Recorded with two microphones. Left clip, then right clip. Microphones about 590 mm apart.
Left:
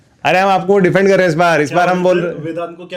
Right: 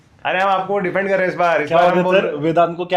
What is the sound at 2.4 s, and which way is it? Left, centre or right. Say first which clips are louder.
Speech: right 7 dB; right.